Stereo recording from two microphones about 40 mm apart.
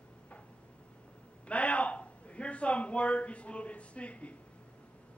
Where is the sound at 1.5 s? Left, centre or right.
Left.